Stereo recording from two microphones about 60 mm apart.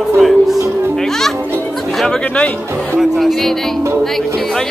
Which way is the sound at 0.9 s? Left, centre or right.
Centre.